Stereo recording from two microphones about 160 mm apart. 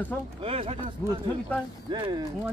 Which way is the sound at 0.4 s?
40° right (ahead or behind).